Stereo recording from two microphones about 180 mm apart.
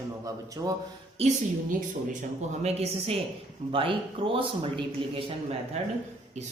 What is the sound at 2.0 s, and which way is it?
Speech, 40° right (ahead or behind).